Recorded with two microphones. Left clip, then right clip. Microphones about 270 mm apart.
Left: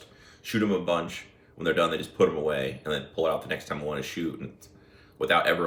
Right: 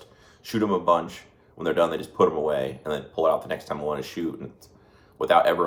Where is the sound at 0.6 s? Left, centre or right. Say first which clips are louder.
Right 5 dB; right.